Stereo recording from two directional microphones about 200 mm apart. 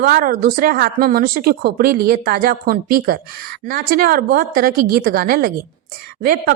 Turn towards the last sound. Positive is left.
turn(degrees=-50)  # may be behind; listen again after turning